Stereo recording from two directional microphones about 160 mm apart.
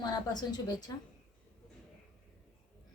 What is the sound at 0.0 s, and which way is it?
Speech, 25° left (ahead or behind).